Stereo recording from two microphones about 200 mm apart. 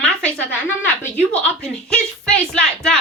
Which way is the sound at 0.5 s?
5° left (ahead or behind).